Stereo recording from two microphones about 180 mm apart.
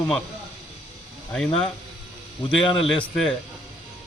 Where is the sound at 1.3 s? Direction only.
5° left (ahead or behind).